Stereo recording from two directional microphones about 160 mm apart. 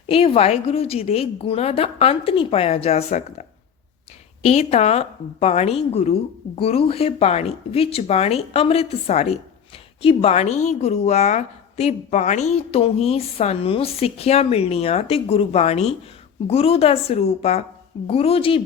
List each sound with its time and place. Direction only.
0.1 s speech: 35° left (ahead or behind)
4.4 s speech: 40° left (ahead or behind)